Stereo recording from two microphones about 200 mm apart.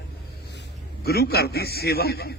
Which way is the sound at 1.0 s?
50° left (ahead or behind).